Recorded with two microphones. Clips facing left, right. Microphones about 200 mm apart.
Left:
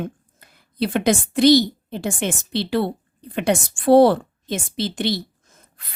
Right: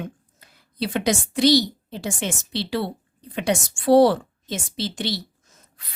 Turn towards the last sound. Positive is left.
turn(degrees=55)  # may be behind; listen again after turning